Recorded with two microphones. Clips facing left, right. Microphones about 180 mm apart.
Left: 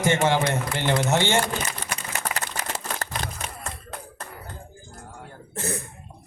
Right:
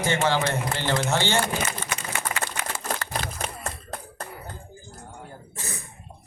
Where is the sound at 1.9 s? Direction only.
40° left (ahead or behind).